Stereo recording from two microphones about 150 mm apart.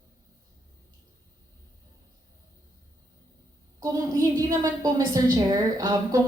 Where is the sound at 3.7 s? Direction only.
25° right (ahead or behind).